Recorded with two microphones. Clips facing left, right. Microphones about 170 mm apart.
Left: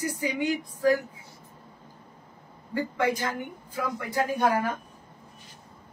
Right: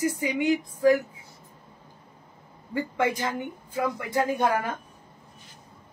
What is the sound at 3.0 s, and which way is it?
Speech, 20° right (ahead or behind).